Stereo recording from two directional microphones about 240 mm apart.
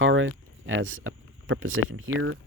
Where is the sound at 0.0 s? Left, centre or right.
Right.